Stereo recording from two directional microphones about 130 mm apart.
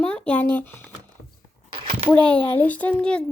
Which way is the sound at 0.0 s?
10° left (ahead or behind).